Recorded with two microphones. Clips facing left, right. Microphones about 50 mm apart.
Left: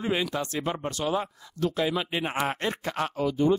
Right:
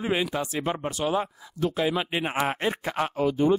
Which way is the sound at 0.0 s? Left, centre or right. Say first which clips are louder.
Right 1 dB; centre.